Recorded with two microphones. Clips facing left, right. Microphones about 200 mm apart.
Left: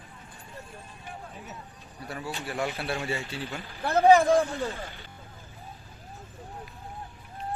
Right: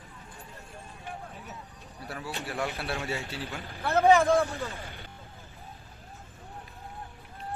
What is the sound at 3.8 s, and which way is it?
Speech, 15° left (ahead or behind).